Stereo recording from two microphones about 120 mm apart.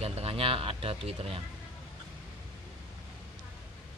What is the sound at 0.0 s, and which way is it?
Speech, 55° right (ahead or behind).